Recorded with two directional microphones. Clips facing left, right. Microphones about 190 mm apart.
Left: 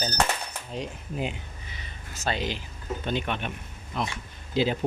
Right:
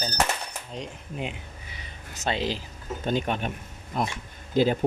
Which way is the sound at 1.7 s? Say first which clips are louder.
Even; 15° right (ahead or behind).